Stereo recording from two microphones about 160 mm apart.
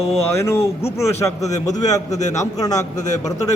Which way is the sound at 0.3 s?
15° left (ahead or behind).